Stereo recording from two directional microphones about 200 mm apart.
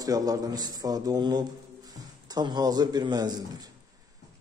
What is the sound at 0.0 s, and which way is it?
A man's voice, 20° right (ahead or behind).